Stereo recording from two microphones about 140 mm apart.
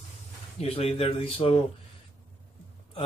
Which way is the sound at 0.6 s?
45° left (ahead or behind).